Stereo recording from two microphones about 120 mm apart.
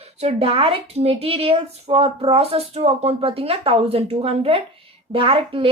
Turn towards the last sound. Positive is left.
turn(degrees=-50)  # may be behind; listen again after turning